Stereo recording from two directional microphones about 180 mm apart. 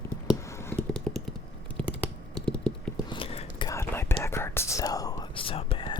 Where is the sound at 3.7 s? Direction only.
15° left (ahead or behind).